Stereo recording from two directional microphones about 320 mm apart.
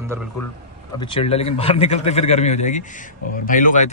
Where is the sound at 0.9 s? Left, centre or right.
Centre.